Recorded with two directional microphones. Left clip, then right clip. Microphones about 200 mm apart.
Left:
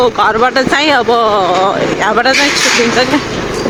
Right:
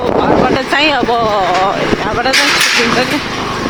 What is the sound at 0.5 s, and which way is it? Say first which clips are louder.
Speech: left 2 dB; 15° left (ahead or behind).